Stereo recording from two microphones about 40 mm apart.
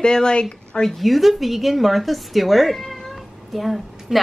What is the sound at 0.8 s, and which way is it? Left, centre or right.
A woman's voice, centre.